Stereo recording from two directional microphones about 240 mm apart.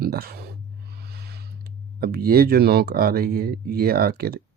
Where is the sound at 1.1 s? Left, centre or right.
Right.